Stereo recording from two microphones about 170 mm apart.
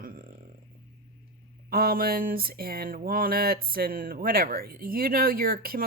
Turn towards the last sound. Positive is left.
turn(degrees=-60)  # may be behind; listen again after turning